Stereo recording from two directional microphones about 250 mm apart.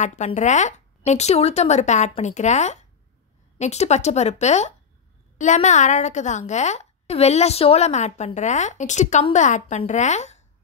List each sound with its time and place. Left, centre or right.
0.0 s a woman's voice: left